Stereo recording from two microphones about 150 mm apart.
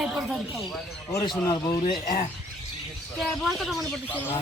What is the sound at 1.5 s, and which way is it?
Speech, 25° left (ahead or behind).